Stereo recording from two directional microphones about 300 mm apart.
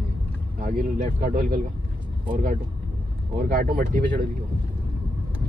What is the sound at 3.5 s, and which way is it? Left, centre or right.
Speech, right.